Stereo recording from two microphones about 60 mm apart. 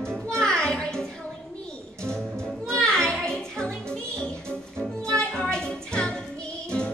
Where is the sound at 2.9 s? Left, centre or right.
Centre.